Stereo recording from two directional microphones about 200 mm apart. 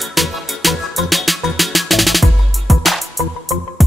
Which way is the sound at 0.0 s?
Centre (ahead or behind).